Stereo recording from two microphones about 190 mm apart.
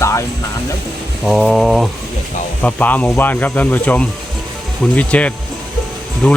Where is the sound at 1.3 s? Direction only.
Centre (ahead or behind).